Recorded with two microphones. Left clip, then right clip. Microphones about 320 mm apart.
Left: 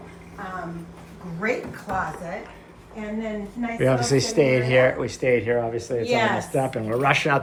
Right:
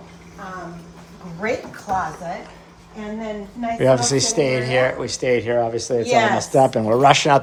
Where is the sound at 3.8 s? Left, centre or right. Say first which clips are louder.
Right 4 dB; centre.